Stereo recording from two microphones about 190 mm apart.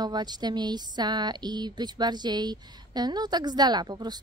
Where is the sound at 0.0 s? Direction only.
20° right (ahead or behind).